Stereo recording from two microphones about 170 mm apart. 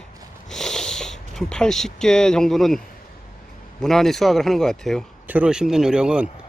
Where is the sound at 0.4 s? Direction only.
Centre (ahead or behind).